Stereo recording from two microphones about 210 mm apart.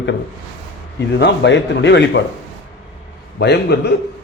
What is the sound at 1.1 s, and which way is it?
Speech, 55° left (ahead or behind).